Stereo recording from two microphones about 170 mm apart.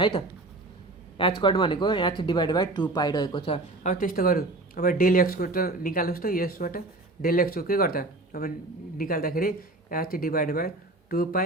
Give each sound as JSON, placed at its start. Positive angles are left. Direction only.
{"t": 1.4, "sound": "speech", "side_deg": 30}
{"t": 3.8, "sound": "speech", "side_deg": 55}